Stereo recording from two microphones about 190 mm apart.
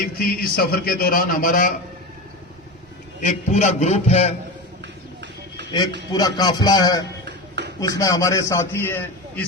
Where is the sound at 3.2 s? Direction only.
40° left (ahead or behind).